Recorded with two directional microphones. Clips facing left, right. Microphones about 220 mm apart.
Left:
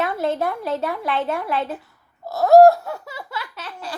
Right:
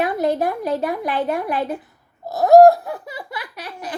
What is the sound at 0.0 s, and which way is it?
A woman's voice, 15° right (ahead or behind).